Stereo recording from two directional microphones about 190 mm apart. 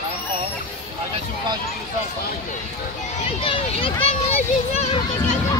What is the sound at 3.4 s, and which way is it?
Speech, 30° left (ahead or behind).